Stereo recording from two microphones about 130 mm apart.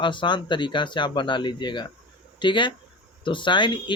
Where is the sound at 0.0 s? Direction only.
40° left (ahead or behind).